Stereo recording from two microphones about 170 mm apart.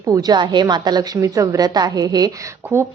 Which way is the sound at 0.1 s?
25° right (ahead or behind).